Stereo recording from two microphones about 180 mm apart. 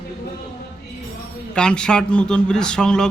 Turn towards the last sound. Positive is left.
turn(degrees=5)  # may be behind; listen again after turning